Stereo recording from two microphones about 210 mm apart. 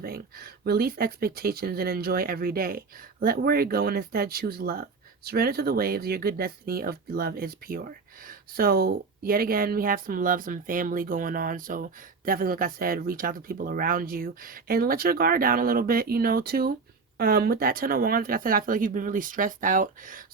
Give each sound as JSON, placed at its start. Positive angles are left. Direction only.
{"t": 0.0, "sound": "speech", "side_deg": -45}